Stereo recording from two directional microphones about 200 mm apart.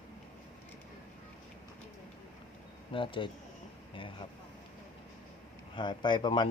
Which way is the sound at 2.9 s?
25° left (ahead or behind).